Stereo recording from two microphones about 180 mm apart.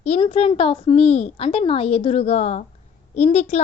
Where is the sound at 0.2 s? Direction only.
35° left (ahead or behind).